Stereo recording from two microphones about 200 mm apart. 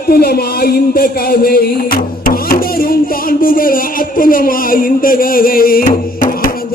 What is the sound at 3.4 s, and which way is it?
Music, 45° left (ahead or behind).